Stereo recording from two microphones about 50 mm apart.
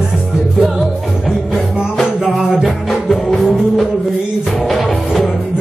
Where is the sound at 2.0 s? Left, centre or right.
Centre.